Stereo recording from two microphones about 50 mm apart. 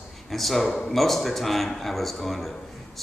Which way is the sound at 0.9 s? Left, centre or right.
Centre.